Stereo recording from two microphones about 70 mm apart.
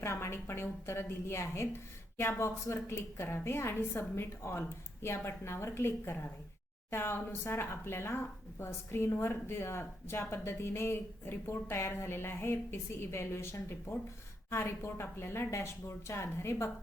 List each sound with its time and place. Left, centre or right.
0.0 s speech: left